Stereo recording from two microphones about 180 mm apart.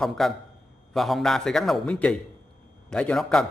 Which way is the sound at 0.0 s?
Centre (ahead or behind).